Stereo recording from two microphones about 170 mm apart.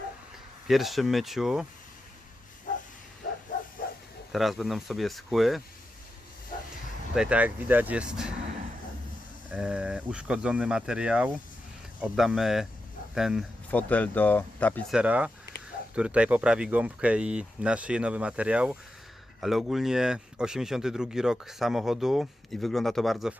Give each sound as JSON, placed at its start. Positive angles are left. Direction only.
{"t": 0.7, "sound": "speech", "side_deg": 0}
{"t": 3.5, "sound": "bow-wow", "side_deg": 50}
{"t": 4.3, "sound": "speech", "side_deg": 0}
{"t": 7.1, "sound": "speech", "side_deg": -5}
{"t": 9.5, "sound": "speech", "side_deg": -5}
{"t": 13.7, "sound": "speech", "side_deg": 10}
{"t": 14.9, "sound": "speech", "side_deg": -5}